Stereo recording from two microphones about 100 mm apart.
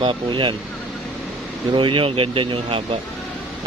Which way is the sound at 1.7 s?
55° right (ahead or behind).